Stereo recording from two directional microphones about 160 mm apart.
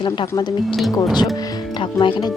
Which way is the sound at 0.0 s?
30° left (ahead or behind).